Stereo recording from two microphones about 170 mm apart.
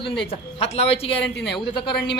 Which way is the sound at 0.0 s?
35° left (ahead or behind).